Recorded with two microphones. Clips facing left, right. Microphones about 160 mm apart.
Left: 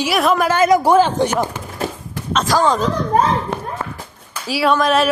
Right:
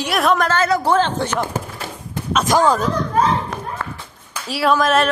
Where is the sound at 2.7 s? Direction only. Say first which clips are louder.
Even; 5° right (ahead or behind).